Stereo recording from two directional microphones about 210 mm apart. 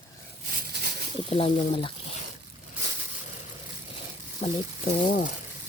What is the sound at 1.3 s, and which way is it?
Speech, 25° left (ahead or behind).